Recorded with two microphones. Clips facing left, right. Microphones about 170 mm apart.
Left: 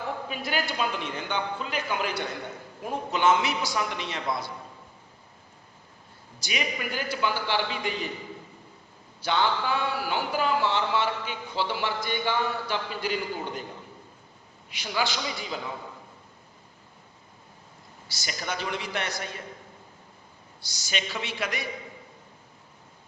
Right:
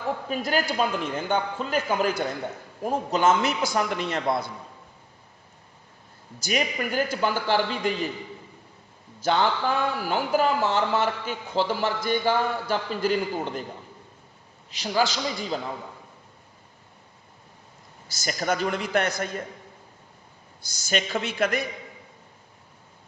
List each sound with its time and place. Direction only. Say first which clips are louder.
0.3 s a man's voice: right 7 dB; 40° right (ahead or behind)
6.4 s speech: right 5 dB; 45° right (ahead or behind)
9.2 s speech: right 3 dB; 40° right (ahead or behind)
14.7 s a man's voice: right 5 dB; 40° right (ahead or behind)
18.1 s speech: right 7 dB; 45° right (ahead or behind)
20.6 s speech: right 6 dB; 50° right (ahead or behind)